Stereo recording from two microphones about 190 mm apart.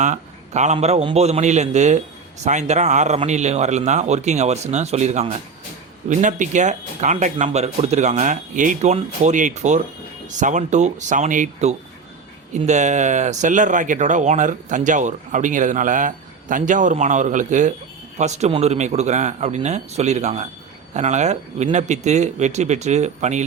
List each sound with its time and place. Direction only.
0.0 s a man's voice: 40° right (ahead or behind)